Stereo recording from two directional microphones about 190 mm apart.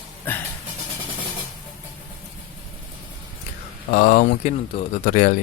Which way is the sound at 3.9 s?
45° left (ahead or behind).